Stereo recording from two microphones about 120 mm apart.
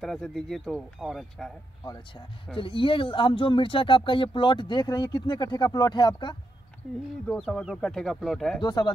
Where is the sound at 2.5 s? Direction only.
45° left (ahead or behind).